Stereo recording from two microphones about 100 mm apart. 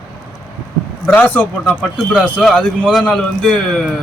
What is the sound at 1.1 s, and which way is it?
Speech, 15° left (ahead or behind).